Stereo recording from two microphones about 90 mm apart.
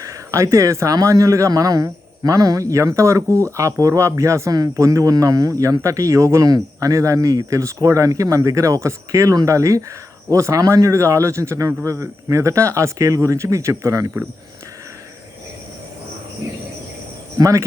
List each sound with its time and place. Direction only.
0.0 s speech: 35° right (ahead or behind)
17.3 s speech: 35° right (ahead or behind)